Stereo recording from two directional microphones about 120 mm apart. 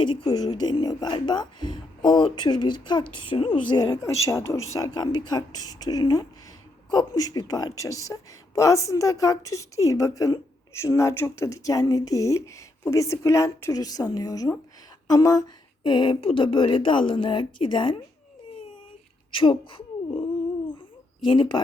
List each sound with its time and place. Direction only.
0.0 s speech: 35° left (ahead or behind)
19.3 s speech: 45° left (ahead or behind)
20.7 s a sound: 45° left (ahead or behind)